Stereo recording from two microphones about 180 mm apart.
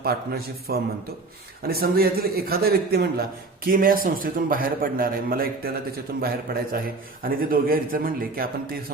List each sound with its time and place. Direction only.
0.0 s a man's voice: 60° right (ahead or behind)